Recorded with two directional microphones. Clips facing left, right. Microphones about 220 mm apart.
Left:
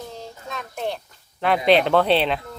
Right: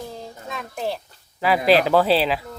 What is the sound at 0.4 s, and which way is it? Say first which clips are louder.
Speech: right 1 dB; centre (ahead or behind).